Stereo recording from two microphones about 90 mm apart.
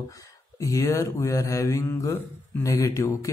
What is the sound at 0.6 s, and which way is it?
Speech, 35° left (ahead or behind).